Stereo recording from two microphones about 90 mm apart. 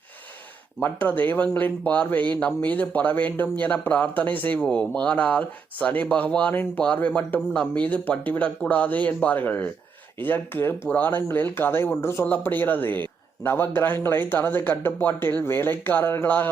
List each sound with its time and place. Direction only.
0.8 s speech: 20° left (ahead or behind)